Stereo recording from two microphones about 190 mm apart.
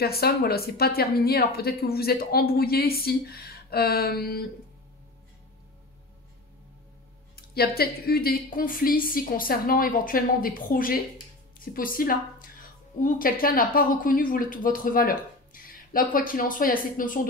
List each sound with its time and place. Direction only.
0.0 s speech: 55° left (ahead or behind)
7.3 s speech: 55° left (ahead or behind)